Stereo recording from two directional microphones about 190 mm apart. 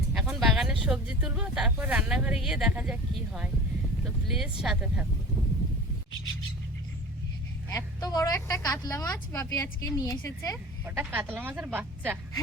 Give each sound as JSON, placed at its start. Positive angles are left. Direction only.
{"t": 0.1, "sound": "speech", "side_deg": -5}
{"t": 4.6, "sound": "speech", "side_deg": -5}
{"t": 7.7, "sound": "a woman's voice", "side_deg": 20}
{"t": 10.8, "sound": "speech", "side_deg": -10}